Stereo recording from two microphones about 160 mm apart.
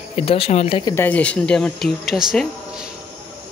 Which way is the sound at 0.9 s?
10° left (ahead or behind).